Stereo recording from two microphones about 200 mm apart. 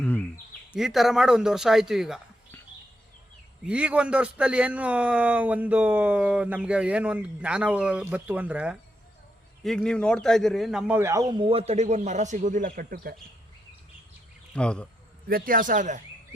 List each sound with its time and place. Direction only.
0.0 s a sound: 10° left (ahead or behind)
0.7 s speech: centre (ahead or behind)
3.7 s a man's voice: 5° right (ahead or behind); by 13.1 s 50° right (ahead or behind)
14.5 s speech: 5° left (ahead or behind)
15.3 s speech: 45° right (ahead or behind)